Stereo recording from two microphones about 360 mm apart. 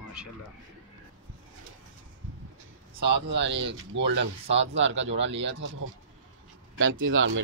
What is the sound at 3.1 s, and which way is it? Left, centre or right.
Speech, right.